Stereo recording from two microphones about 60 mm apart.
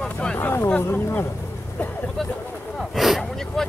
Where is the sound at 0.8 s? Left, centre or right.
Left.